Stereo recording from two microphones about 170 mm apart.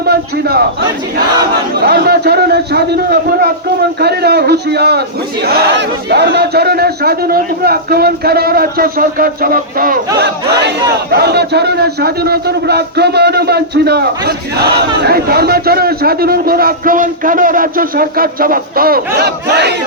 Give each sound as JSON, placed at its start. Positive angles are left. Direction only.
{"t": 0.0, "sound": "a man's voice", "side_deg": -65}
{"t": 10.2, "sound": "battle cry", "side_deg": -80}
{"t": 11.1, "sound": "a man's voice", "side_deg": -70}